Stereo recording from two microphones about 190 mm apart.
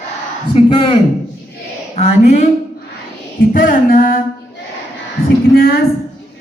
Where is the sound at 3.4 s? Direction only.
50° left (ahead or behind).